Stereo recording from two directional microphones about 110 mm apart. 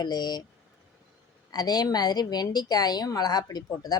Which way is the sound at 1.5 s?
35° left (ahead or behind).